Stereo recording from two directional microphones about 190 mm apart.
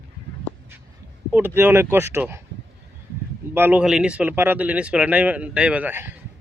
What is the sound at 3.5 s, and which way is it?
Speech, 10° right (ahead or behind).